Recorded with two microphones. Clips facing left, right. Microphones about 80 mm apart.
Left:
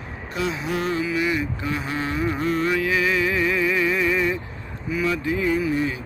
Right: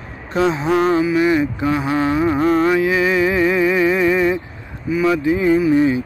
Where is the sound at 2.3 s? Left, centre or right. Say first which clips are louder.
Right 8 dB; right.